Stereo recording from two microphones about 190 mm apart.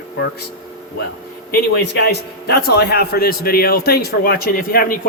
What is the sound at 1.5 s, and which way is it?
A man's voice, 55° left (ahead or behind).